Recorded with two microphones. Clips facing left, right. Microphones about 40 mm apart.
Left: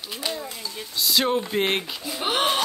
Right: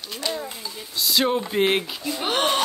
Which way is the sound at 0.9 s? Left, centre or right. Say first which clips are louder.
Right 1 dB; centre.